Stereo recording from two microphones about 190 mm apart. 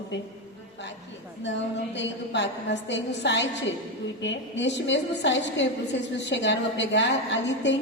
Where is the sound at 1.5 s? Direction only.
70° left (ahead or behind).